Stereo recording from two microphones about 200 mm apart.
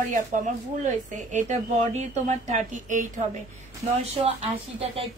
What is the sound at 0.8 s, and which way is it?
Speech, 35° right (ahead or behind).